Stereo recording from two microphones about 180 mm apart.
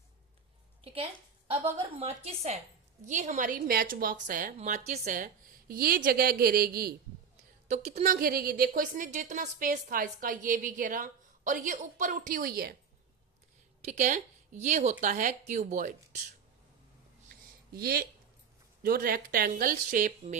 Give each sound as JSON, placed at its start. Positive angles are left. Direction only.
{"t": 2.0, "sound": "a woman's voice", "side_deg": -35}
{"t": 7.7, "sound": "a woman's voice", "side_deg": -40}
{"t": 13.8, "sound": "a woman's voice", "side_deg": -40}
{"t": 17.2, "sound": "a sound", "side_deg": -55}
{"t": 18.8, "sound": "a woman's voice", "side_deg": -55}